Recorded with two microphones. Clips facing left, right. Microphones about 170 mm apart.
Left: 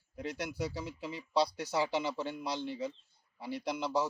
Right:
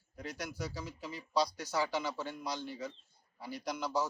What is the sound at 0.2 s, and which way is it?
Speech, 25° left (ahead or behind).